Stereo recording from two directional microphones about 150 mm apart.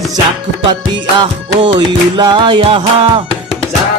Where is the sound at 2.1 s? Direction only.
30° right (ahead or behind).